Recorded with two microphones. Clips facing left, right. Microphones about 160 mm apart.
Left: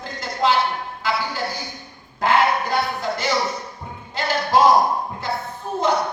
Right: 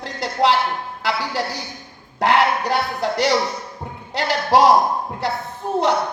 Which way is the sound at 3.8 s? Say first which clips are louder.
Right 3 dB; 45° right (ahead or behind).